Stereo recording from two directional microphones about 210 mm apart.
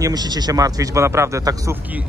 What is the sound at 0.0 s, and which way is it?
Speech, 20° right (ahead or behind).